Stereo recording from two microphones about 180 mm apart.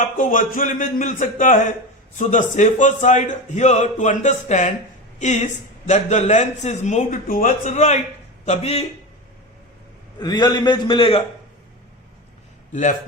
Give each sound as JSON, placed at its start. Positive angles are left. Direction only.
{"t": 0.2, "sound": "a man's voice", "side_deg": 50}
{"t": 10.2, "sound": "a man's voice", "side_deg": 25}
{"t": 12.7, "sound": "speech", "side_deg": 45}